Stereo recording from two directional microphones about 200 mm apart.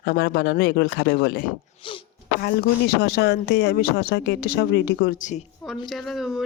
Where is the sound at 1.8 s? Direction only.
25° left (ahead or behind).